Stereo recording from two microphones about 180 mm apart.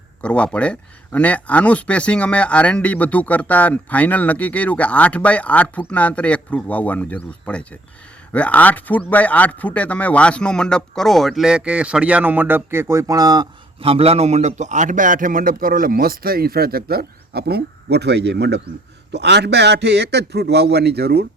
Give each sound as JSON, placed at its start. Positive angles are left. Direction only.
{"t": 0.2, "sound": "a man's voice", "side_deg": 5}